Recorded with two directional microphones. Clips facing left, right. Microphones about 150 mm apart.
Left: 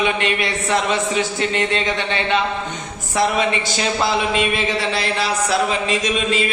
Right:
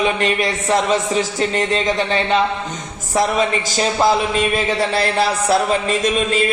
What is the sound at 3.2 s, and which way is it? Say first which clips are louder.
Speech: right 1 dB; 40° right (ahead or behind).